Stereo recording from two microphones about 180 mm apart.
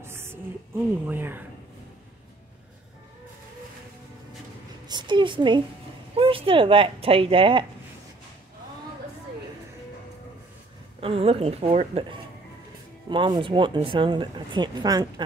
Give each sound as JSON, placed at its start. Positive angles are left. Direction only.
{"t": 0.0, "sound": "music", "side_deg": -15}
{"t": 1.0, "sound": "speech", "side_deg": -10}
{"t": 4.8, "sound": "a woman's voice", "side_deg": -25}
{"t": 11.0, "sound": "speech", "side_deg": -30}